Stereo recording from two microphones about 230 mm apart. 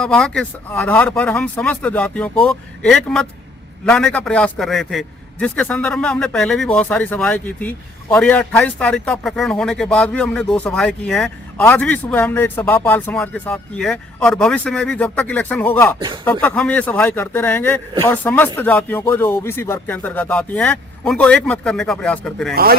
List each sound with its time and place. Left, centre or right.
0.0 s speech: centre
22.5 s speech: right